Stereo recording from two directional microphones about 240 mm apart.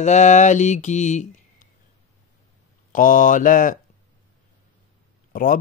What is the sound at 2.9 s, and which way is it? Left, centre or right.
Speech, left.